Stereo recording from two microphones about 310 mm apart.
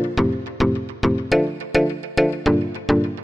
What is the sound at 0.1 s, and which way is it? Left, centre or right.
Music, centre.